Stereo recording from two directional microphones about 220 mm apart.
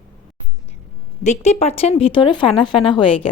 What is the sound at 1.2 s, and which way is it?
Speech, 30° left (ahead or behind).